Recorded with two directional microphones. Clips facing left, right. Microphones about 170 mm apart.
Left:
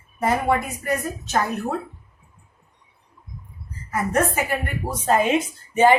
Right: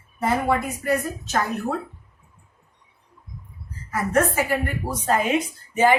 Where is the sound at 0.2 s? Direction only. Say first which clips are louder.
Left 1 dB; 20° left (ahead or behind).